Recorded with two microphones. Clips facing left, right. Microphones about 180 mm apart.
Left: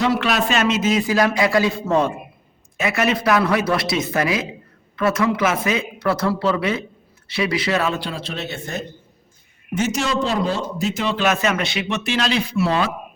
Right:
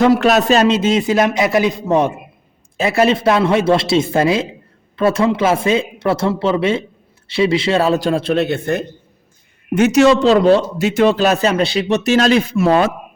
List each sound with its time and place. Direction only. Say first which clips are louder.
0.0 s a man's voice: right 7 dB; 45° right (ahead or behind); by 2.1 s 20° right (ahead or behind)
2.7 s a man's voice: right 6 dB; 30° right (ahead or behind); by 11.0 s 75° right (ahead or behind)
11.0 s speech: right 8 dB; 40° right (ahead or behind)